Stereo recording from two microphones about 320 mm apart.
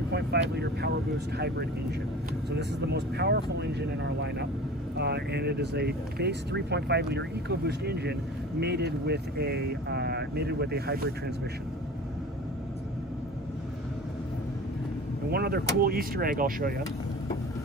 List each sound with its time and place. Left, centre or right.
0.1 s speech: right
2.5 s speech: right
15.3 s speech: right